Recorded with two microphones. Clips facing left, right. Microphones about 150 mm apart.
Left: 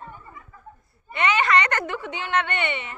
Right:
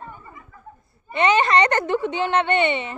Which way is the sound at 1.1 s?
25° right (ahead or behind).